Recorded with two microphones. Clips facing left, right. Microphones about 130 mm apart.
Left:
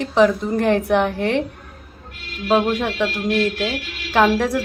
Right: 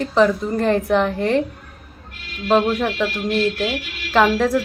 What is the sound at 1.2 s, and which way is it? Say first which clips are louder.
Speech: right 2 dB; 70° left (ahead or behind).